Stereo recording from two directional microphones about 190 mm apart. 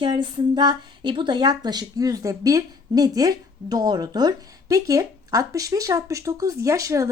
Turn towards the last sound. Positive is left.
turn(degrees=-15)  # may be behind; listen again after turning